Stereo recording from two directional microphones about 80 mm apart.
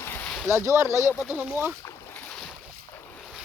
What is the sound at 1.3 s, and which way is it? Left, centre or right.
Speech, right.